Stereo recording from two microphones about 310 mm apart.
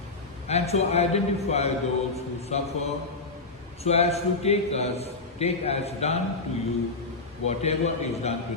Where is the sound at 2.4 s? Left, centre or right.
Centre.